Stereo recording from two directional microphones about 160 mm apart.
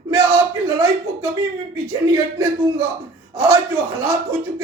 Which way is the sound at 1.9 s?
20° right (ahead or behind).